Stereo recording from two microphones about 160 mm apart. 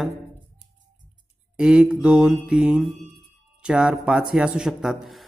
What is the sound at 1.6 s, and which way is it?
A man's voice, 5° right (ahead or behind).